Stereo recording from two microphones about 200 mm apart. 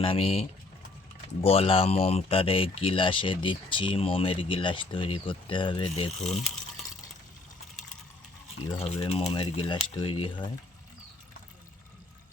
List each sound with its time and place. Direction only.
0.0 s speech: 30° left (ahead or behind)
8.6 s speech: 30° left (ahead or behind)